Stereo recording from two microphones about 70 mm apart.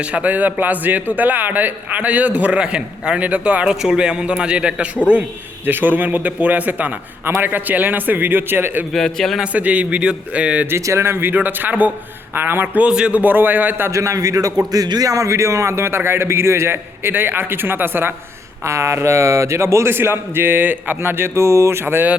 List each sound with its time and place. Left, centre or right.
0.0 s a man's voice: centre
5.6 s a man's voice: right
8.9 s a man's voice: centre
9.4 s a man's voice: centre
10.7 s a man's voice: right
13.9 s a man's voice: right
18.6 s a man's voice: right